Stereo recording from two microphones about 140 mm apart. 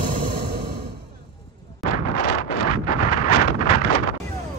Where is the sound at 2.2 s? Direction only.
90° left.